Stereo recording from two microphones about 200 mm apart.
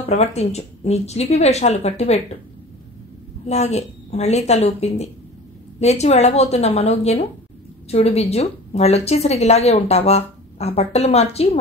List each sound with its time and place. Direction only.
0.0 s a woman's voice: 30° left (ahead or behind)
3.4 s a woman's voice: 35° left (ahead or behind)